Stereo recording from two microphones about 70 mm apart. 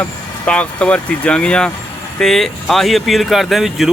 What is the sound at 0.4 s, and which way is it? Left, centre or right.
Speech, centre.